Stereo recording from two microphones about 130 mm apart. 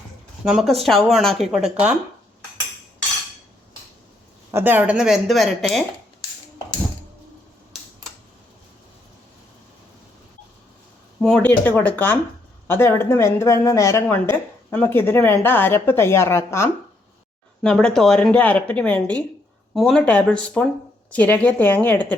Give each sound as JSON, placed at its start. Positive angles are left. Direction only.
{"t": 0.4, "sound": "speech", "side_deg": 0}
{"t": 4.5, "sound": "speech", "side_deg": -15}
{"t": 11.2, "sound": "a woman's voice", "side_deg": 5}
{"t": 14.1, "sound": "a woman's voice", "side_deg": 15}
{"t": 17.6, "sound": "a woman's voice", "side_deg": 5}